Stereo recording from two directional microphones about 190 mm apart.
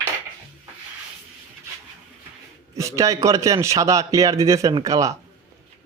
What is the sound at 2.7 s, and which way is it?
A man's voice, 15° right (ahead or behind).